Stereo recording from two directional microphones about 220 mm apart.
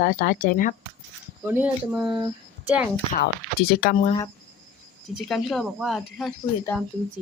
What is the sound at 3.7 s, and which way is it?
Speech, 40° left (ahead or behind).